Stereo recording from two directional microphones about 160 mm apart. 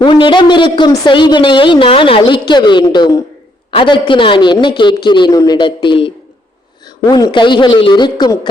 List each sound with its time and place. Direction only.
0.0 s a woman's voice: 30° left (ahead or behind)